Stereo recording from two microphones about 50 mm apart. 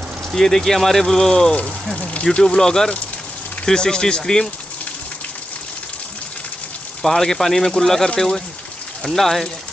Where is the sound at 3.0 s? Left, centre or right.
Left.